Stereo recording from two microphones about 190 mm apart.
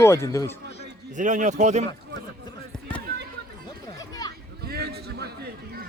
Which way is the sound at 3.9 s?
20° left (ahead or behind).